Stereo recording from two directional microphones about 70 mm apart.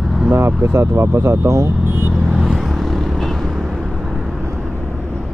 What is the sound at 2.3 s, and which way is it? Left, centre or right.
Vehicle, centre.